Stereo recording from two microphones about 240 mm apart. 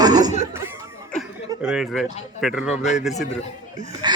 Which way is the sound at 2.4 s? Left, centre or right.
Centre.